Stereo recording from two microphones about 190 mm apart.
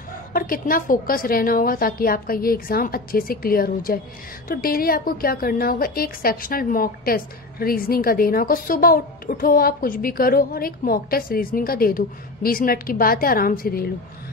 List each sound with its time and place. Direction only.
0.3 s a woman's voice: 50° left (ahead or behind)